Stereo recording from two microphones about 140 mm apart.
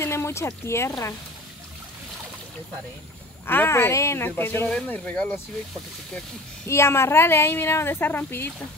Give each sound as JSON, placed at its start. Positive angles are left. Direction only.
{"t": 0.0, "sound": "speech", "side_deg": 20}
{"t": 3.4, "sound": "a woman's voice", "side_deg": 15}
{"t": 6.7, "sound": "a woman's voice", "side_deg": 20}